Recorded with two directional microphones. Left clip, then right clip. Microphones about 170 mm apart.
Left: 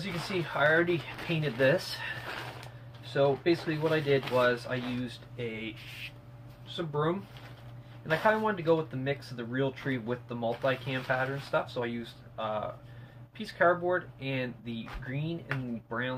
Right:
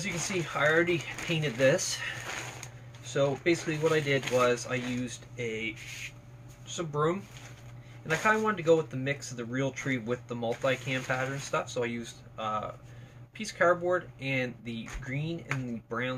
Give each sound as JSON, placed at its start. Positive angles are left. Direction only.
{"t": 0.0, "sound": "speech", "side_deg": -15}
{"t": 6.7, "sound": "speech", "side_deg": -15}